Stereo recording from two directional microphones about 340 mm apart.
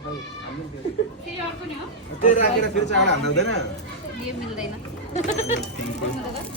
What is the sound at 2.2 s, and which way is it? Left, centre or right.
Speech, left.